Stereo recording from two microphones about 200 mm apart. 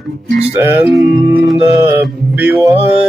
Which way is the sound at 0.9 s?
Centre (ahead or behind).